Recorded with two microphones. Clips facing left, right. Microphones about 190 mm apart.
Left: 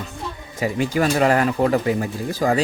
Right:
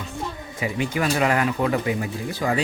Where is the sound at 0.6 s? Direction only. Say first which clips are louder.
Left 4 dB; 40° left (ahead or behind).